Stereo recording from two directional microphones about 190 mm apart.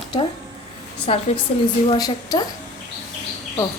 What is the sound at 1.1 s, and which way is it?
Speech, 30° left (ahead or behind).